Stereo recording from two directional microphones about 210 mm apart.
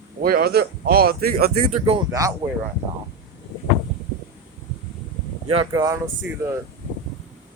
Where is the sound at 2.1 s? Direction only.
15° right (ahead or behind).